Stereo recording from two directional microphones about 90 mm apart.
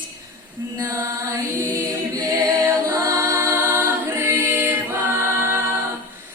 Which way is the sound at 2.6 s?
30° right (ahead or behind).